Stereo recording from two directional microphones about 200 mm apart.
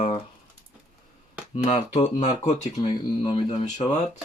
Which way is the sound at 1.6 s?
35° left (ahead or behind).